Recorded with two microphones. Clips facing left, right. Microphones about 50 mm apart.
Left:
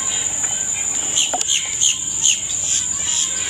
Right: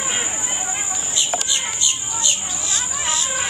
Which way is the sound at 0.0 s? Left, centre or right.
Right.